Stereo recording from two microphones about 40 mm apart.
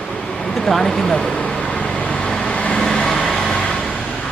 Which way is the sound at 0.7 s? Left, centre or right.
Centre.